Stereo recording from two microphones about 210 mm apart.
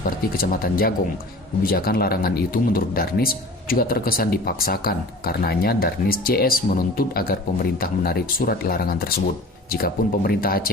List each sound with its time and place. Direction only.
0.3 s speech: 45° left (ahead or behind)